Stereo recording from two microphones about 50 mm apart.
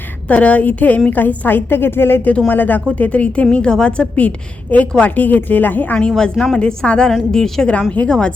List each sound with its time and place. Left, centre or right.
0.3 s a woman's voice: left
1.1 s a woman's voice: left
3.0 s a woman's voice: left
4.9 s a woman's voice: left
6.1 s a woman's voice: centre
7.7 s a woman's voice: left